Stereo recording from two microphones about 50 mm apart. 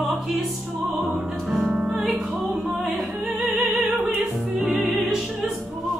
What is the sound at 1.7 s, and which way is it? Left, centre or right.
Music, centre.